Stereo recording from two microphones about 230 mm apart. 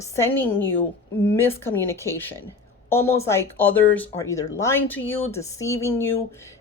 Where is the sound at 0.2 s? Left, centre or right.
Centre.